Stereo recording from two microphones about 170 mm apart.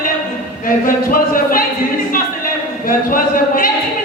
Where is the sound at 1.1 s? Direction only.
55° left (ahead or behind).